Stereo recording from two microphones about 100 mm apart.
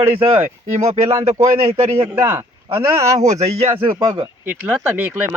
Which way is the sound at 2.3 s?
30° right (ahead or behind).